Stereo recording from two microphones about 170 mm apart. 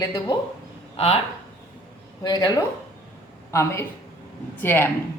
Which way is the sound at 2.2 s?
25° left (ahead or behind).